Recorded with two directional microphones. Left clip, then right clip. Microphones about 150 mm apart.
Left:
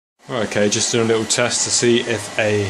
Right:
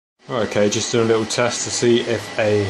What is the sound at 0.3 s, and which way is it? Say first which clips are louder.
Speech: even; 5° left (ahead or behind).